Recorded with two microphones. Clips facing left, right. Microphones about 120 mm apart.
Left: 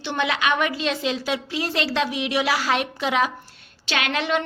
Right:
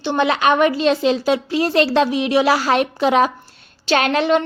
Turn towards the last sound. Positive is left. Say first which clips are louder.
# right 7 dB
turn(degrees=-35)  # may be behind; listen again after turning